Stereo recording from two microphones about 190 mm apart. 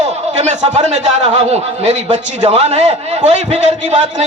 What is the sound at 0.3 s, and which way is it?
A man's voice, 40° right (ahead or behind).